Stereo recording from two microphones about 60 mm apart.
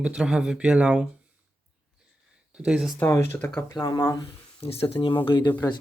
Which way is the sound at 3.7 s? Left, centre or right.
Left.